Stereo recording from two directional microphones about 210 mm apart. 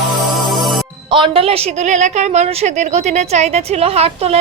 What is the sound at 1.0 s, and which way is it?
A woman's voice, 25° right (ahead or behind).